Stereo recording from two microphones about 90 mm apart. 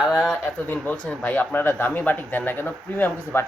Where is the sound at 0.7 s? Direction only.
15° left (ahead or behind).